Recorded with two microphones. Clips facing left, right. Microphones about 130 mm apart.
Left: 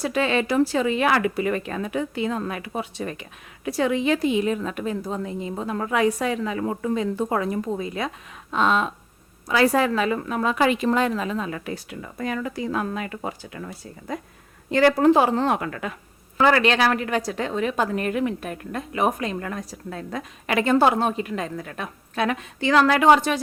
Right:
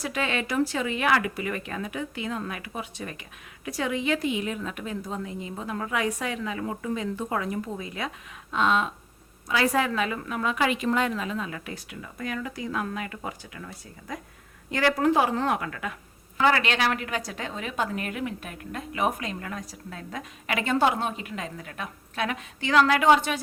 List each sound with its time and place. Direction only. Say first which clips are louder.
0.0 s a woman's voice: left 6 dB; 30° left (ahead or behind)
14.7 s a woman's voice: left 6 dB; 30° left (ahead or behind)